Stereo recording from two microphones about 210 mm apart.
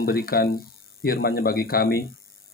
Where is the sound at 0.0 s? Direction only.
45° left (ahead or behind).